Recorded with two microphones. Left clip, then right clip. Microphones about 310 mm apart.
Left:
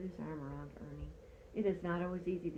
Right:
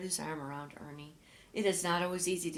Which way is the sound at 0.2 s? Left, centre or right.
Right.